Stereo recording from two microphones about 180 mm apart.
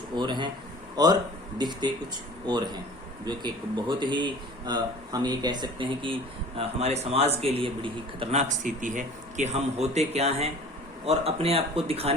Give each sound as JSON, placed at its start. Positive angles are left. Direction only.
{"t": 0.2, "sound": "a man's voice", "side_deg": -25}